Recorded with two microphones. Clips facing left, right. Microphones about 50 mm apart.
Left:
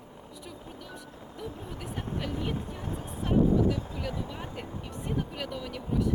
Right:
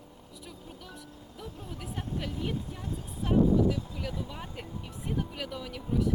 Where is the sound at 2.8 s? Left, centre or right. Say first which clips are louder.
Left 2 dB; left.